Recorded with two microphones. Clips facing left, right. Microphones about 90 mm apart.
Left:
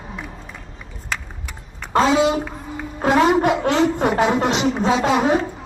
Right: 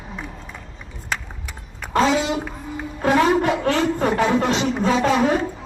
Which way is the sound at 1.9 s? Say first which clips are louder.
Left 3 dB; 30° left (ahead or behind).